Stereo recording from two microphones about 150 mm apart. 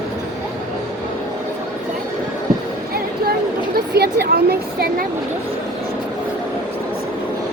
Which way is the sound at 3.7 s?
90° right.